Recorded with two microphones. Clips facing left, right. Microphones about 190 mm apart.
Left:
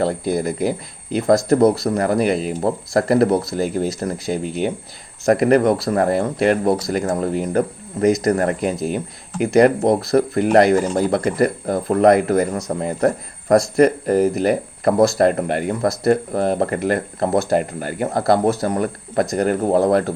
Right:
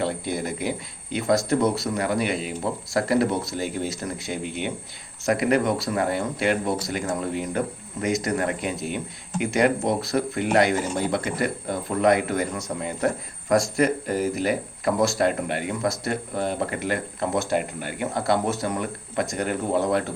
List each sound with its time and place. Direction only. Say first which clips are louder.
0.0 s speech: left 7 dB; 40° left (ahead or behind)